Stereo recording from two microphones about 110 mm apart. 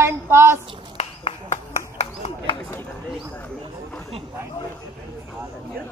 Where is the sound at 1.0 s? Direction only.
80° left.